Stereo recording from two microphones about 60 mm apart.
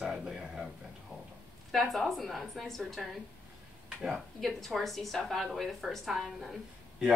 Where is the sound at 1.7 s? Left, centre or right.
Centre.